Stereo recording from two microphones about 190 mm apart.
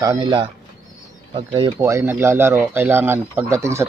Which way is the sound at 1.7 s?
15° right (ahead or behind).